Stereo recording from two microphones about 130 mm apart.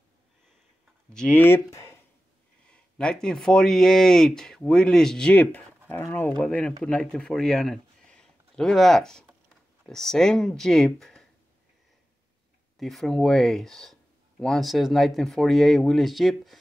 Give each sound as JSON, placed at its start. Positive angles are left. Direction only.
{"t": 1.1, "sound": "speech", "side_deg": 5}
{"t": 1.4, "sound": "speech", "side_deg": 20}
{"t": 2.6, "sound": "speech", "side_deg": 5}
{"t": 12.7, "sound": "speech", "side_deg": 0}